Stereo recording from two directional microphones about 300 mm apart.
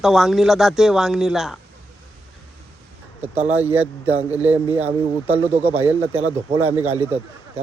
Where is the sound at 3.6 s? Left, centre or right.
Centre.